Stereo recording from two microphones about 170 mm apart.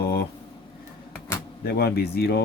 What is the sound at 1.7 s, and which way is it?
Speech, 70° left (ahead or behind).